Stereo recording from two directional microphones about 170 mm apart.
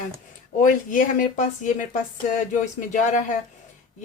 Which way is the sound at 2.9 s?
45° left (ahead or behind).